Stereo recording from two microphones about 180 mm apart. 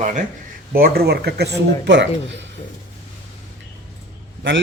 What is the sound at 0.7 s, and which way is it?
Speech, 55° right (ahead or behind).